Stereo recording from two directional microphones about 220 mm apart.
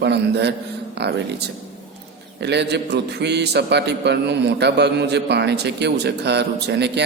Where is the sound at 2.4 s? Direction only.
50° right (ahead or behind).